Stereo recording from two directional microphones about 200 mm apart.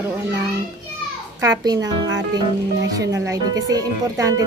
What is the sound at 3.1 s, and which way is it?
Speech, 15° right (ahead or behind).